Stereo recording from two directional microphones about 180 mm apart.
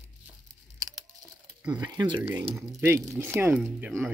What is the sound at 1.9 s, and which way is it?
Speech, 20° right (ahead or behind).